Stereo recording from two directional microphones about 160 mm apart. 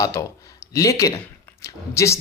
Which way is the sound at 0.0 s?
20° left (ahead or behind).